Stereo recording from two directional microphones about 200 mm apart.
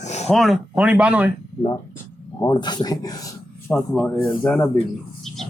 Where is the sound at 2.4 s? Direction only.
20° left (ahead or behind).